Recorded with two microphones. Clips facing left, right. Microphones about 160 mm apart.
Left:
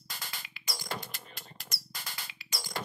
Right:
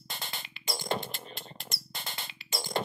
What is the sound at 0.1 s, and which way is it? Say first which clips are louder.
Music: right 4 dB; 25° right (ahead or behind).